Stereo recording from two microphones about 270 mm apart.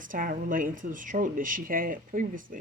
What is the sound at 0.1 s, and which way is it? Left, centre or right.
Speech, right.